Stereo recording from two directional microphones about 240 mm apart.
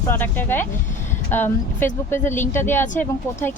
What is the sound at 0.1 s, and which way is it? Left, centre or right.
Speech, centre.